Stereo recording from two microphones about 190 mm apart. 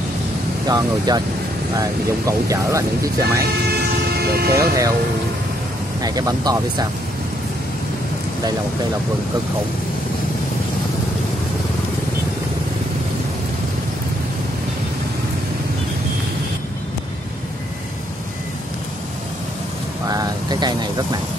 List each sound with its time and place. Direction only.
0.7 s speech: 20° right (ahead or behind)
4.1 s vehicle: 55° right (ahead or behind)
4.6 s speech: 15° right (ahead or behind)
6.0 s speech: 20° right (ahead or behind)
20.1 s vehicle: 20° right (ahead or behind)